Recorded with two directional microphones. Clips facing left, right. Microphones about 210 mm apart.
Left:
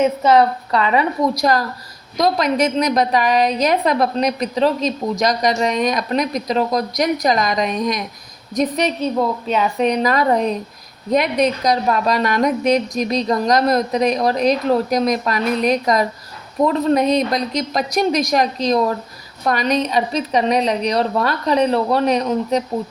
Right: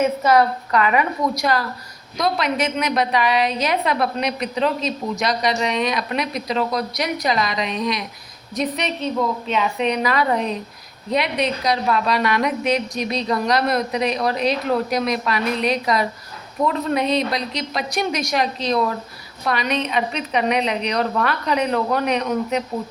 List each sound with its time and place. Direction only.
0.2 s a woman's voice: 25° left (ahead or behind)